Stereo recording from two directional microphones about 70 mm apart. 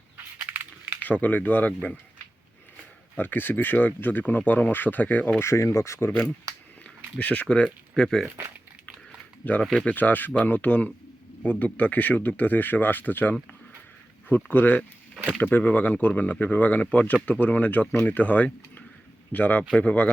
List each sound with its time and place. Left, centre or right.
0.4 s a sound: right
1.0 s speech: left
3.2 s speech: left
5.4 s speech: left
6.1 s speech: left; by 8.3 s centre
9.4 s speech: left
14.5 s speech: left
15.1 s a sound: centre
15.4 s speech: left